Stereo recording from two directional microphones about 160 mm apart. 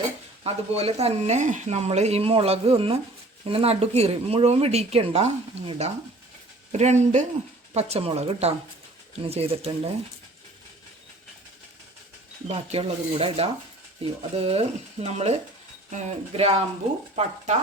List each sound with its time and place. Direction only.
0.4 s speech: 40° right (ahead or behind)
12.5 s speech: 40° right (ahead or behind)